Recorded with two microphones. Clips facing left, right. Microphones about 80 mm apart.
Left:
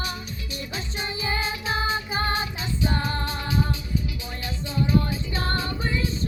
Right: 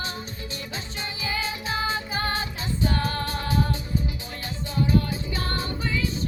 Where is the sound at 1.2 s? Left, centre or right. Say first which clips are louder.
Left 1 dB; left.